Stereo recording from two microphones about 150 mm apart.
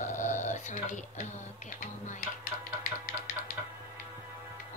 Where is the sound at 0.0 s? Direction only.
55° left (ahead or behind).